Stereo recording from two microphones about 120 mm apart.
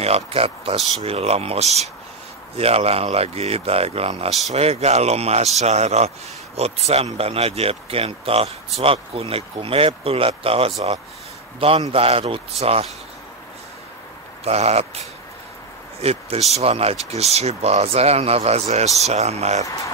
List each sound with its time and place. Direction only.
0.0 s speech: 55° right (ahead or behind)
14.4 s speech: 60° right (ahead or behind)
16.0 s speech: 60° right (ahead or behind)